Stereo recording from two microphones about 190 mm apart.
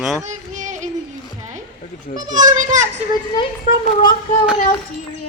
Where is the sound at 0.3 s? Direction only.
40° right (ahead or behind).